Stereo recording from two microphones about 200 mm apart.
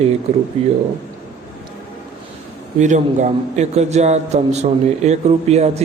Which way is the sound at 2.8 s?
35° right (ahead or behind).